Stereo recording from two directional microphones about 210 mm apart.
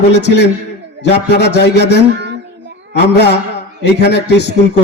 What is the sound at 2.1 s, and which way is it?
Child singing, 55° right (ahead or behind).